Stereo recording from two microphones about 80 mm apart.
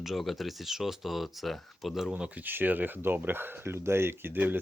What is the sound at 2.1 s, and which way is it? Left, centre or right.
Speech, right.